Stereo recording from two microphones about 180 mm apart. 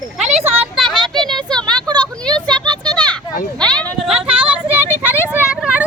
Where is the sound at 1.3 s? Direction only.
5° left (ahead or behind).